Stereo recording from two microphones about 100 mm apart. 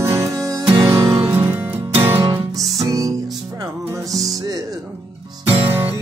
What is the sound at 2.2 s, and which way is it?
Music, 45° right (ahead or behind).